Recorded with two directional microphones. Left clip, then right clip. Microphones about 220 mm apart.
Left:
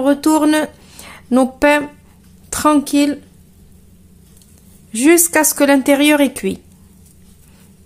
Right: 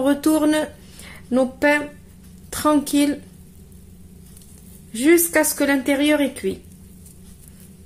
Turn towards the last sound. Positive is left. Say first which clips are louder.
# left 6 dB
turn(degrees=30)  # may be behind; listen again after turning